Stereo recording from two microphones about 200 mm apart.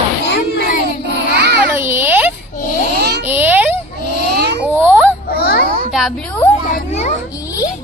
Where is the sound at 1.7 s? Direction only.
10° right (ahead or behind).